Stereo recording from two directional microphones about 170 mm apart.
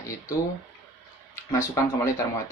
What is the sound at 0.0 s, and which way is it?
Speech, 20° left (ahead or behind).